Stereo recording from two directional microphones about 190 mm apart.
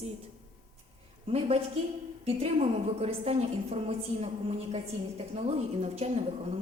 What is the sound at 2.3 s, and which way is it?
A woman's voice, 35° right (ahead or behind).